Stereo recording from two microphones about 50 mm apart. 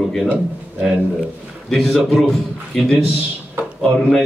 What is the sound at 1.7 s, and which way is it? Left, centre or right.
A man's voice, centre.